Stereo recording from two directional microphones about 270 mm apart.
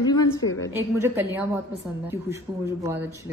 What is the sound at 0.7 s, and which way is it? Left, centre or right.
Speech, centre.